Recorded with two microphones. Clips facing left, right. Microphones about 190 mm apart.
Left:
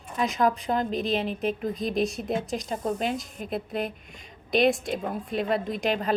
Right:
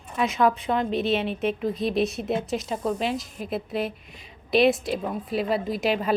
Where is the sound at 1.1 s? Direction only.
35° left (ahead or behind).